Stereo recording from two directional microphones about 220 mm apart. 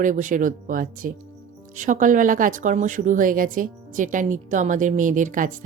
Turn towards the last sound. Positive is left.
turn(degrees=-35)  # may be behind; listen again after turning